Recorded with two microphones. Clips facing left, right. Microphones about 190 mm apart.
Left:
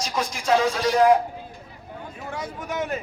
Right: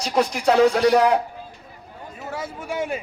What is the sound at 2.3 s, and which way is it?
Speech, 5° right (ahead or behind).